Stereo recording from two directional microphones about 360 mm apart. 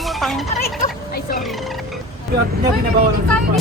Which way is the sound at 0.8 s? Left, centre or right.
Left.